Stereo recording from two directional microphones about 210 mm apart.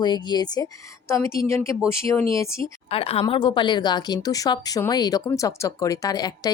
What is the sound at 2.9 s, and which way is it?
A woman's voice, 25° left (ahead or behind).